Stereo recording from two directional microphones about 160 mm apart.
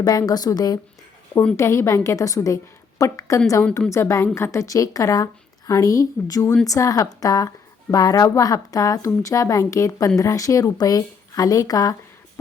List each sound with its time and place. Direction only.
0.0 s a woman's voice: 25° left (ahead or behind)
1.3 s a woman's voice: 10° left (ahead or behind)